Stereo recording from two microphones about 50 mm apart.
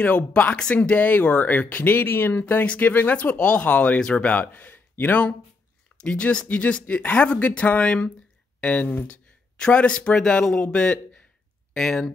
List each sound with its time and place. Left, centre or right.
0.0 s speech: left
2.0 s speech: left
2.6 s speech: left
2.9 s speech: left
3.2 s speech: left
4.5 s speech: left
6.0 s speech: left